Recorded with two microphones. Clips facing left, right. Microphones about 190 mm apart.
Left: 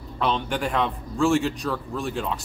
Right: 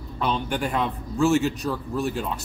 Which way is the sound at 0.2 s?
Centre (ahead or behind).